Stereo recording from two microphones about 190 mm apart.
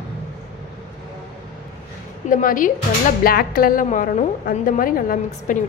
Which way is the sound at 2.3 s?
45° left (ahead or behind).